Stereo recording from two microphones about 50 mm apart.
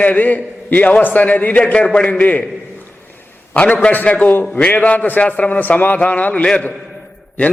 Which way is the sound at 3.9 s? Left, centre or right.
Left.